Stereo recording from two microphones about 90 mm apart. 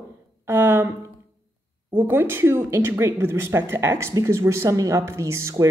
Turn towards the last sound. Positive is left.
turn(degrees=-30)  # may be behind; listen again after turning